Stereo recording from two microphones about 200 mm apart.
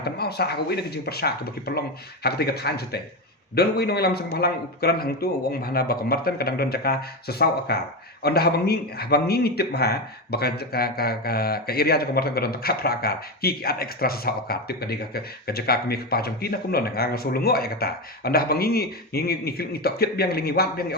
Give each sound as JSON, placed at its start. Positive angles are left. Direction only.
{"t": 0.0, "sound": "speech", "side_deg": 55}